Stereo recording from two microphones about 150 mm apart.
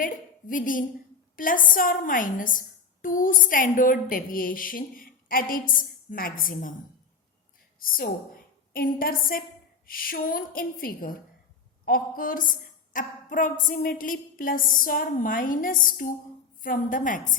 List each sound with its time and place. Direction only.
0.0 s a woman's voice: 65° left (ahead or behind)